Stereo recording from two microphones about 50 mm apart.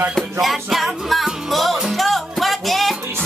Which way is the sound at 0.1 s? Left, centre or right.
Centre.